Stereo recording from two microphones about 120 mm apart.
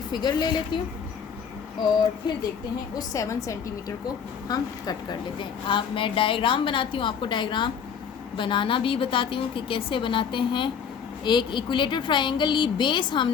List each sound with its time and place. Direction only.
0.1 s speech: 35° left (ahead or behind)
2.9 s a woman's voice: 30° left (ahead or behind)